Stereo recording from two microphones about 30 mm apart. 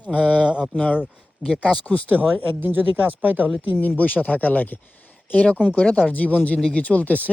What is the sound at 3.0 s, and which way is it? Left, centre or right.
Speech, right.